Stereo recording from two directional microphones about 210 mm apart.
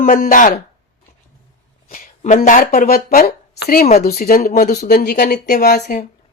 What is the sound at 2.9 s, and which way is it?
Speech, 45° left (ahead or behind).